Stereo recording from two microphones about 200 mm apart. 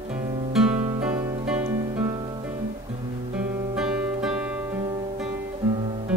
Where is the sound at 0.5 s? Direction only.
5° right (ahead or behind).